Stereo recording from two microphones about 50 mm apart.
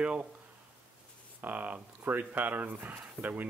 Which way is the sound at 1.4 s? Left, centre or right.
Right.